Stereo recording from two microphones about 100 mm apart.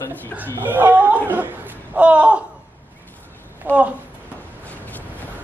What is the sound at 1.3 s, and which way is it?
Laughter, 20° right (ahead or behind).